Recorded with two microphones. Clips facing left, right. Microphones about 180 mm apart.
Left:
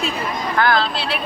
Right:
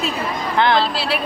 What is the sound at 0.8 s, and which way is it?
Speech, 5° right (ahead or behind).